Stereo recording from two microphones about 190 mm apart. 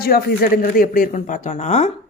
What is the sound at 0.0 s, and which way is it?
Speech, 55° left (ahead or behind).